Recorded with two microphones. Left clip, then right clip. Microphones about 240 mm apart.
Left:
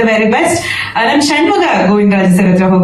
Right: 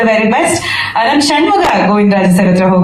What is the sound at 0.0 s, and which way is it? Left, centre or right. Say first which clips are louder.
A woman's voice: even; right.